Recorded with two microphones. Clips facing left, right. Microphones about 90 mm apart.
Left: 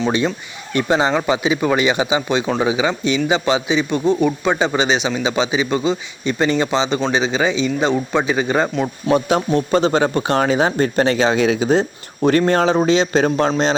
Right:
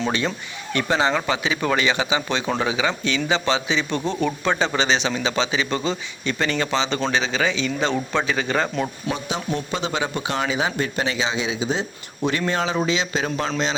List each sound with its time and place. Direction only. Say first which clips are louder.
0.7 s a man's voice: left 4 dB; 20° left (ahead or behind)
9.5 s speech: left 9 dB; 40° left (ahead or behind)